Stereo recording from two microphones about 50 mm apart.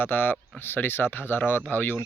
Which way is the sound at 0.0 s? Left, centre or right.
Left.